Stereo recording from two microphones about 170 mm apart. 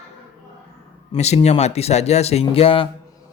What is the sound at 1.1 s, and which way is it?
Speech, 40° left (ahead or behind).